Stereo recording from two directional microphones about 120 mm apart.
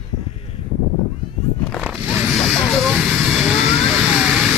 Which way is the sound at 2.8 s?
Centre (ahead or behind).